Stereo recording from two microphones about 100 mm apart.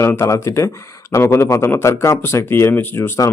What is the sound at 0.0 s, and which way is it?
A man's voice, 25° left (ahead or behind).